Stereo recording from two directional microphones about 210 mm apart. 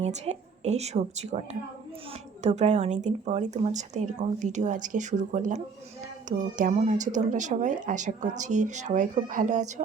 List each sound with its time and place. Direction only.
0.0 s a woman's voice: 30° right (ahead or behind)